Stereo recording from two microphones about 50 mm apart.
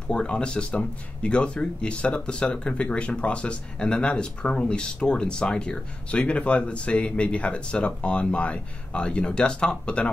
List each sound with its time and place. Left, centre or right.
0.1 s speech: centre